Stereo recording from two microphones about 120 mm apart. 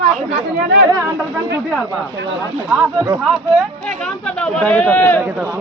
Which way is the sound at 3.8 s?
10° left (ahead or behind).